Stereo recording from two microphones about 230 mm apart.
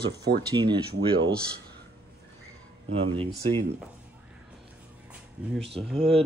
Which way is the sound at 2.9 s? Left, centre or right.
Right.